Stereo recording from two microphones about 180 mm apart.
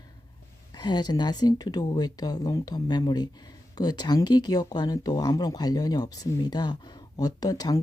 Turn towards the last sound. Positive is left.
turn(degrees=20)  # may be behind; listen again after turning